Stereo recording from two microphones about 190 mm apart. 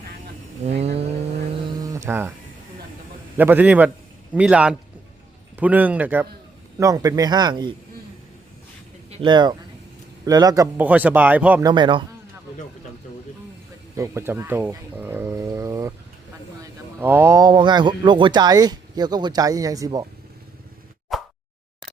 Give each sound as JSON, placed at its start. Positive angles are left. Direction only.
{"t": 0.6, "sound": "vehicle", "side_deg": -35}
{"t": 1.8, "sound": "mantra", "side_deg": -15}
{"t": 3.3, "sound": "a man's voice", "side_deg": -10}
{"t": 9.0, "sound": "speech", "side_deg": -30}
{"t": 11.6, "sound": "speech", "side_deg": -25}
{"t": 13.9, "sound": "speech", "side_deg": -15}
{"t": 17.0, "sound": "speech", "side_deg": -10}
{"t": 21.1, "sound": "a sound", "side_deg": 0}